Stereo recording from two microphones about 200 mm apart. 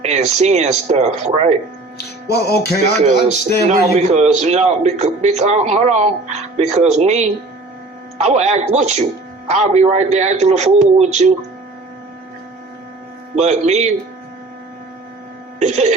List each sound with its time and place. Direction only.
0.0 s a man's voice: 35° right (ahead or behind)
2.3 s music: 55° left (ahead or behind)
3.7 s a man's voice: 35° right (ahead or behind)
13.3 s a man's voice: 35° right (ahead or behind)
15.5 s speech: 35° right (ahead or behind)